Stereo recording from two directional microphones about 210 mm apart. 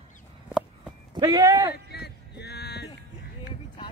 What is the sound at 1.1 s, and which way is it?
Speech, 15° right (ahead or behind).